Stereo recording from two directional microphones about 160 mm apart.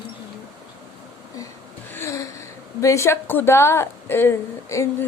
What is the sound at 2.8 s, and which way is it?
A woman's voice, 20° left (ahead or behind).